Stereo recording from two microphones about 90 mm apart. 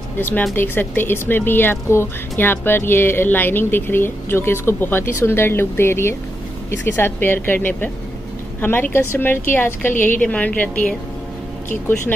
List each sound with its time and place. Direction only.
0.6 s speech: 25° left (ahead or behind)